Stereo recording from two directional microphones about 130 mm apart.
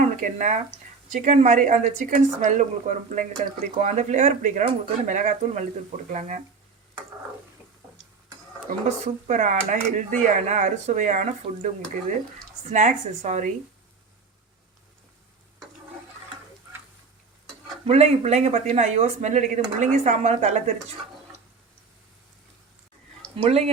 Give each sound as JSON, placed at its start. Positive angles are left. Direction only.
{"t": 0.2, "sound": "a woman's voice", "side_deg": -70}
{"t": 8.6, "sound": "a woman's voice", "side_deg": -70}
{"t": 12.7, "sound": "a woman's voice", "side_deg": -70}
{"t": 17.8, "sound": "speech", "side_deg": -55}
{"t": 23.4, "sound": "speech", "side_deg": -50}